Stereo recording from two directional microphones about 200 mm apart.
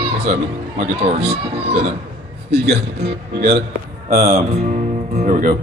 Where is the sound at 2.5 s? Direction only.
55° right (ahead or behind).